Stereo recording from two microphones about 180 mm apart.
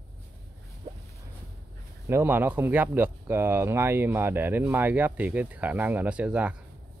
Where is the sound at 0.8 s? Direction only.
25° right (ahead or behind).